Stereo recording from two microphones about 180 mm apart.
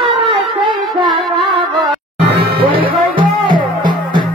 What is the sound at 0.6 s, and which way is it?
Music, 30° right (ahead or behind).